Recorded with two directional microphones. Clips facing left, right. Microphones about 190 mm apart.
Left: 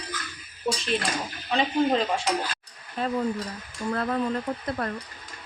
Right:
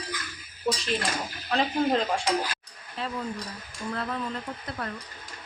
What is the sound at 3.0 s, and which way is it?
Speech, 45° left (ahead or behind).